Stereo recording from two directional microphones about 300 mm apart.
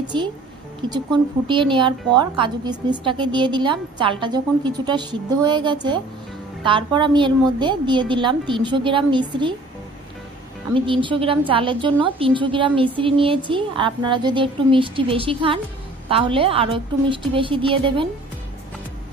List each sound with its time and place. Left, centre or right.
0.1 s a woman's voice: centre
10.7 s a woman's voice: centre